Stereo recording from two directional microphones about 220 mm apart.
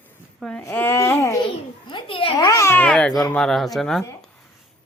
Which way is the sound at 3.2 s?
Centre (ahead or behind).